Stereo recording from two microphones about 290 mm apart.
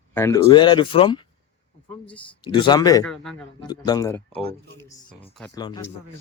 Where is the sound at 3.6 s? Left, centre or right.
Centre.